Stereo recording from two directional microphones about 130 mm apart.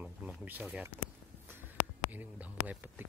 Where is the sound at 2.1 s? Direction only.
10° right (ahead or behind).